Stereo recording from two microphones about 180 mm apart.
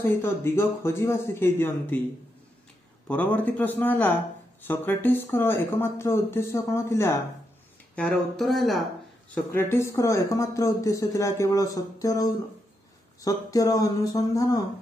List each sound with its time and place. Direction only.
0.0 s speech: 15° left (ahead or behind)
3.1 s speech: 10° left (ahead or behind)
9.3 s speech: 15° left (ahead or behind)